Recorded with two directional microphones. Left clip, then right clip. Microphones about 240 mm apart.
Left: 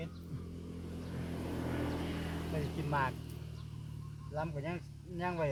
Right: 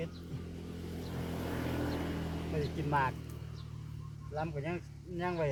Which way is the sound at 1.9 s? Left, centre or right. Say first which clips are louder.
Right 2 dB; centre.